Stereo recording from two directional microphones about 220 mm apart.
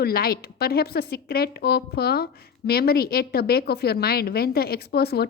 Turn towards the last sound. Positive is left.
turn(degrees=45)  # may be behind; listen again after turning